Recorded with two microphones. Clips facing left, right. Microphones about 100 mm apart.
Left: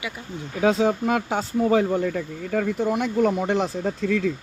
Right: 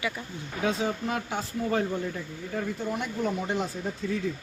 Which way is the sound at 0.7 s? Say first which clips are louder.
Left 9 dB; 80° left.